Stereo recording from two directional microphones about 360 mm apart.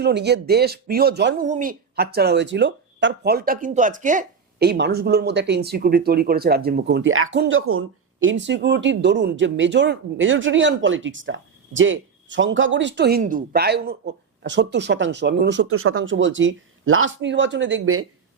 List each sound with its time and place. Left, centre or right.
0.0 s speech: right